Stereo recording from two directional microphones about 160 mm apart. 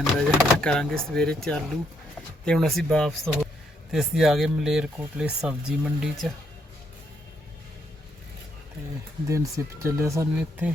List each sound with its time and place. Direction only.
0.0 s speech: 5° left (ahead or behind)
9.3 s speech: 20° right (ahead or behind)